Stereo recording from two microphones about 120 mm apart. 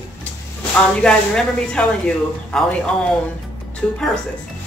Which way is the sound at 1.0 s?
10° left (ahead or behind).